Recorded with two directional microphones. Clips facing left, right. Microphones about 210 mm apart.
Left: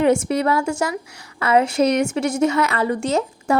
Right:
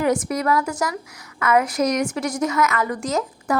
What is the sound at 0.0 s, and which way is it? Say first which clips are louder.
A woman's voice: left 4 dB; 25° left (ahead or behind).